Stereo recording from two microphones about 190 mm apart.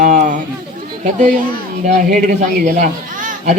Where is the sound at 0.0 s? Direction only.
45° right (ahead or behind).